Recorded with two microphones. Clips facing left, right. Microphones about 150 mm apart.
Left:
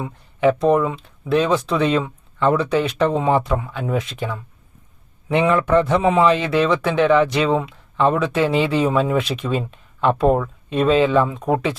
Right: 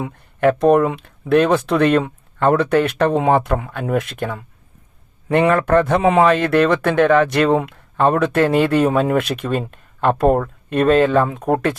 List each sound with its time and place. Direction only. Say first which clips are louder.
0.0 s speech: right 1 dB; 60° right (ahead or behind)